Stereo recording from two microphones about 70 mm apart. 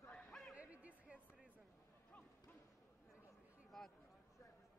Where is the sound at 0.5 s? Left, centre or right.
Right.